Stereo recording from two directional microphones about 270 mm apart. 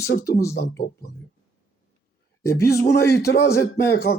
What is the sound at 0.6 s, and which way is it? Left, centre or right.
Speech, left.